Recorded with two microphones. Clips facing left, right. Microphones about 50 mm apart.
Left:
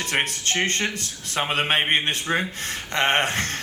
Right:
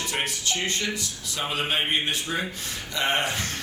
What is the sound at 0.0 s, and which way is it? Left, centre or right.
Speech, left.